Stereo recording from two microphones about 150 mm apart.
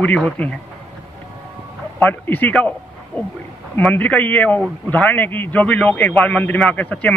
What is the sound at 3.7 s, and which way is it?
A man's voice, 10° left (ahead or behind).